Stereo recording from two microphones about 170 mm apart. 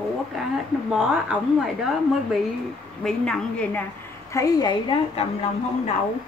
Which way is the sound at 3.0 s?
5° left (ahead or behind).